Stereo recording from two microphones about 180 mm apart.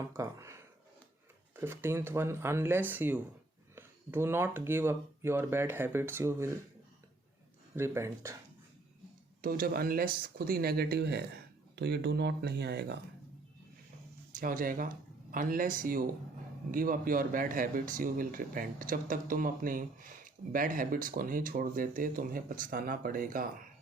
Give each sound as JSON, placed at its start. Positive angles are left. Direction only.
{"t": 0.1, "sound": "speech", "side_deg": -15}
{"t": 7.8, "sound": "speech", "side_deg": -15}
{"t": 9.4, "sound": "speech", "side_deg": -55}
{"t": 14.3, "sound": "speech", "side_deg": -50}